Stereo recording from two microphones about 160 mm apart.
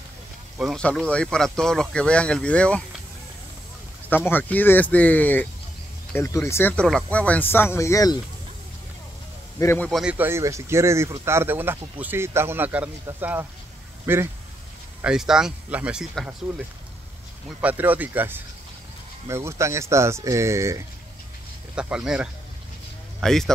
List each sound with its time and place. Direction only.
0.6 s speech: centre (ahead or behind)
4.1 s speech: 10° left (ahead or behind)
9.6 s speech: 15° left (ahead or behind)
9.8 s speech: centre (ahead or behind)
10.1 s speech: 15° right (ahead or behind)
21.7 s speech: 5° right (ahead or behind)